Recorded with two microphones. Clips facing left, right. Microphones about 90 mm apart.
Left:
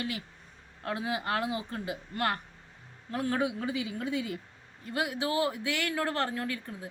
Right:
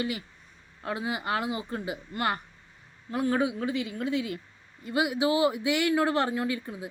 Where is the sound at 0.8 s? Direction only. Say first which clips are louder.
Right 1 dB; 5° right (ahead or behind).